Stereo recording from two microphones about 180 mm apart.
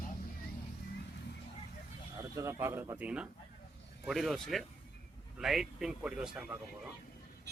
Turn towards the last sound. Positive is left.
turn(degrees=-5)  # may be behind; listen again after turning